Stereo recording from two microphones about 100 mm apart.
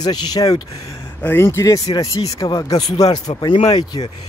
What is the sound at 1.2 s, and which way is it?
Speech, 25° left (ahead or behind).